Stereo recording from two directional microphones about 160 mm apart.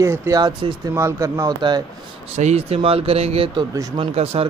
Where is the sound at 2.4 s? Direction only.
40° right (ahead or behind).